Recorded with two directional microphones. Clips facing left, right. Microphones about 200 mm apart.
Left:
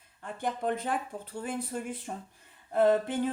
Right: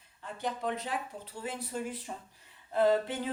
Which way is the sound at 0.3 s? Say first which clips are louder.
Left 3 dB; 50° left (ahead or behind).